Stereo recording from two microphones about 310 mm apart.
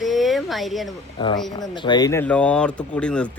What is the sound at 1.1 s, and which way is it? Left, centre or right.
A man's voice, centre.